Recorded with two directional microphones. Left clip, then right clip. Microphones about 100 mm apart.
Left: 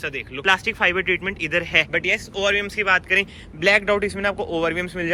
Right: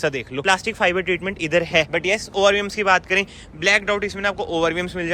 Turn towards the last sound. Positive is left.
turn(degrees=-45)  # may be behind; listen again after turning